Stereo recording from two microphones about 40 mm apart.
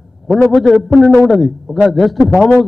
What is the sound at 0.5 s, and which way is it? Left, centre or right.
A man's voice, centre.